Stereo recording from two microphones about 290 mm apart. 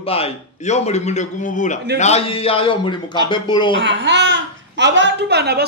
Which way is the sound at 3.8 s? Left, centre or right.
Right.